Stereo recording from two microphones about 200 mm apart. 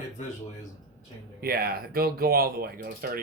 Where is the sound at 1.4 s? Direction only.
50° right (ahead or behind).